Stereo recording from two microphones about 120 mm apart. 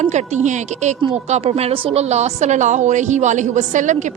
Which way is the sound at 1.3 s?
60° right (ahead or behind).